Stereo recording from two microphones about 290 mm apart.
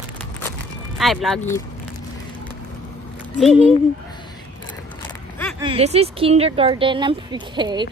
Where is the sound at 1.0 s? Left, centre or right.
Centre.